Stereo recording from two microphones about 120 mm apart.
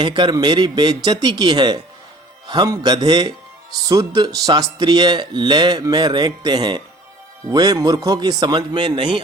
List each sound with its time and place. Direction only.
0.0 s speech: 40° right (ahead or behind)